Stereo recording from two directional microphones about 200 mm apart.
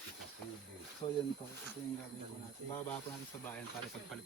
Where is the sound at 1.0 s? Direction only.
25° left (ahead or behind).